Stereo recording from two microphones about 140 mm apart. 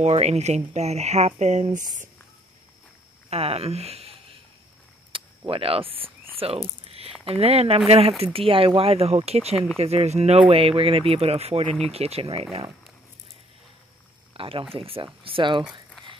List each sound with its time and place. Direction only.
0.0 s speech: 50° right (ahead or behind)
3.3 s speech: 45° right (ahead or behind)
5.1 s a sound: 40° right (ahead or behind)
5.5 s speech: 40° right (ahead or behind)
6.8 s a sound: 45° right (ahead or behind)
7.2 s speech: 45° right (ahead or behind)
14.3 s speech: 40° right (ahead or behind)